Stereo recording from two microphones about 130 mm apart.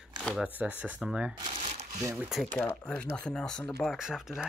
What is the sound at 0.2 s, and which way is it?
Shuffling cards, centre (ahead or behind).